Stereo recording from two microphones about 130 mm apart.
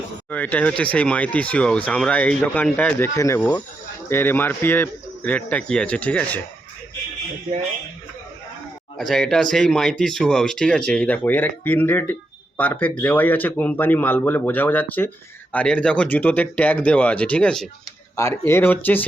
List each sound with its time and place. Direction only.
0.3 s speech: 10° left (ahead or behind)
3.2 s speech: 25° left (ahead or behind)
9.0 s speech: 5° left (ahead or behind)
18.2 s speech: 20° left (ahead or behind)